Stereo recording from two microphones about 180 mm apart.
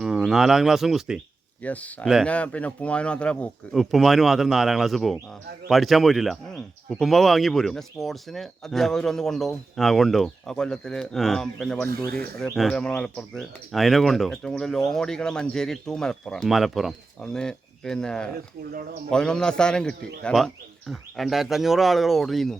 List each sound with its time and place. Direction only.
0.0 s speech: centre (ahead or behind)
1.6 s speech: 10° left (ahead or behind)
11.9 s speech: 55° right (ahead or behind)
12.4 s speech: 5° left (ahead or behind)